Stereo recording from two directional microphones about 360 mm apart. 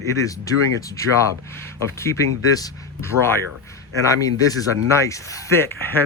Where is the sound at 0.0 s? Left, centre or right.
Centre.